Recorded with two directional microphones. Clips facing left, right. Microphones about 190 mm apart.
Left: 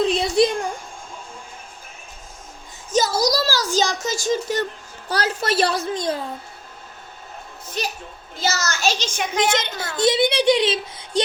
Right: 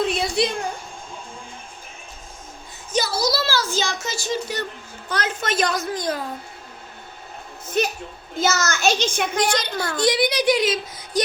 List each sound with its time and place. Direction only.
0.0 s a sound: 45° left (ahead or behind)
2.9 s a child's voice: 45° left (ahead or behind); by 6.2 s 25° left (ahead or behind)
7.8 s a child's voice: 55° right (ahead or behind)
9.4 s a child's voice: 25° left (ahead or behind)